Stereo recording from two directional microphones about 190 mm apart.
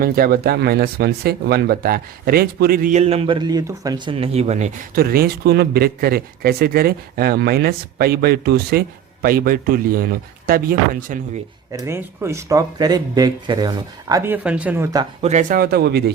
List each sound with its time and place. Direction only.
0.0 s a man's voice: 50° right (ahead or behind)
3.0 s a man's voice: 30° right (ahead or behind); by 11.2 s 50° right (ahead or behind)
11.7 s speech: 15° right (ahead or behind)
15.2 s a man's voice: 40° right (ahead or behind); by 16.1 s 60° right (ahead or behind)